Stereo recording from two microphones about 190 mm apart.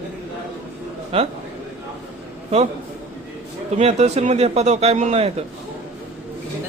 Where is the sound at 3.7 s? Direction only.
35° right (ahead or behind).